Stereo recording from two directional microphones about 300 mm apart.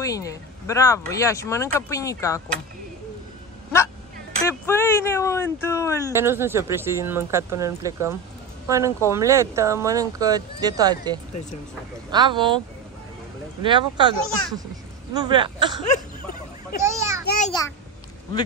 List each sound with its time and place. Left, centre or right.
0.0 s speech: centre
4.5 s speech: centre
6.1 s speech: centre
16.8 s children playing: centre
17.5 s speech: centre